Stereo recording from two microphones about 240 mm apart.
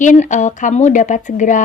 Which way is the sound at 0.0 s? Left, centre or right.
Left.